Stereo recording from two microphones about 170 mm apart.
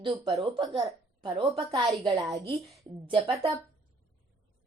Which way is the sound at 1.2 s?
30° right (ahead or behind).